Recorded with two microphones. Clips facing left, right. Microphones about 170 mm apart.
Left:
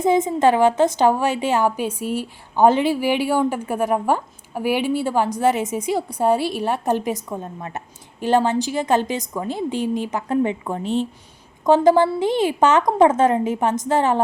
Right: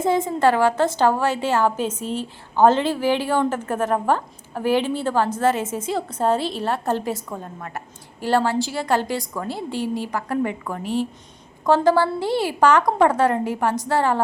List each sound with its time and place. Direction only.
0.0 s a woman's voice: 15° left (ahead or behind)